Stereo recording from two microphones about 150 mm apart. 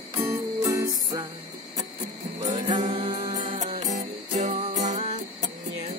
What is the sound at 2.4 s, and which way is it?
Music, 30° right (ahead or behind).